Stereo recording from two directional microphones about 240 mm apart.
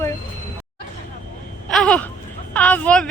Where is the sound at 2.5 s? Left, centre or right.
Centre.